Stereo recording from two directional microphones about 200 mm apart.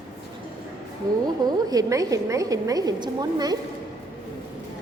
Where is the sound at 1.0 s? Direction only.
20° right (ahead or behind).